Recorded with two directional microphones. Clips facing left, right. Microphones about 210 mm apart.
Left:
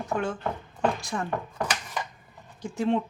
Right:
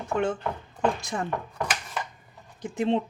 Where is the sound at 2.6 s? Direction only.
20° right (ahead or behind).